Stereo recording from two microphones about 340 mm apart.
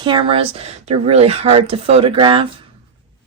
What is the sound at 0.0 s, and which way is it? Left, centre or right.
A woman's voice, centre.